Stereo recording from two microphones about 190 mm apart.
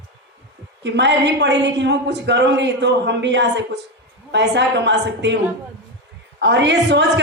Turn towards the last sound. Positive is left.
turn(degrees=-65)  # may be behind; listen again after turning